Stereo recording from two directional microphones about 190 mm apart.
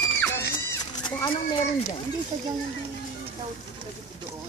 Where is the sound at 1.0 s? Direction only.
20° left (ahead or behind).